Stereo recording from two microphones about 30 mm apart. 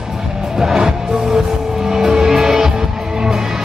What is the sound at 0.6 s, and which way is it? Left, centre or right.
Music, centre.